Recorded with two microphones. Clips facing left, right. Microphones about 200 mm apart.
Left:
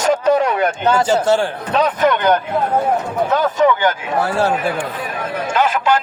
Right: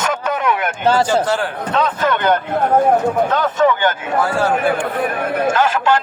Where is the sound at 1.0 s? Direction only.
25° left (ahead or behind).